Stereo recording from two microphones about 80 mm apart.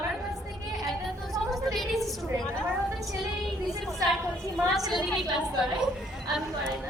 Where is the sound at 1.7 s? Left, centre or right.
Centre.